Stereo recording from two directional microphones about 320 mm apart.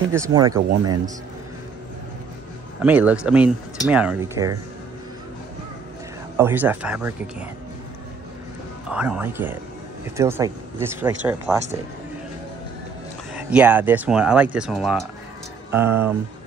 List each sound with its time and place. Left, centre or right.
0.1 s speech: centre
2.8 s speech: centre
6.3 s speech: centre
8.9 s speech: centre
13.3 s speech: centre